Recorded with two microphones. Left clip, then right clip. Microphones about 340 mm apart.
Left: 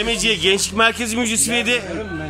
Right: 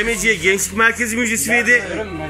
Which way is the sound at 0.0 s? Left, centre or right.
Centre.